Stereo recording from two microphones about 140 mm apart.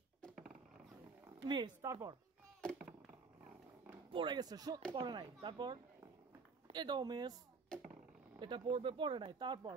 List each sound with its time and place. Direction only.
1.4 s speech: 35° right (ahead or behind)
1.8 s speech: 20° right (ahead or behind)
4.1 s speech: 35° right (ahead or behind)
7.7 s speech: 5° left (ahead or behind)
8.4 s speech: 35° right (ahead or behind)